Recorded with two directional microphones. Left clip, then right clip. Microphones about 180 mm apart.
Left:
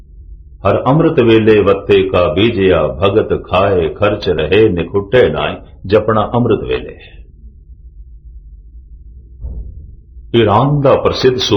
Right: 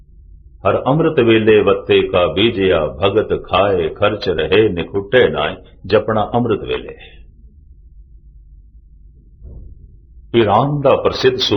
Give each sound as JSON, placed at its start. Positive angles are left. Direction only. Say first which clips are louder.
{"t": 0.6, "sound": "a man's voice", "louder": "left 3 dB", "side_deg": -20}
{"t": 10.3, "sound": "a man's voice", "louder": "left 2 dB", "side_deg": -25}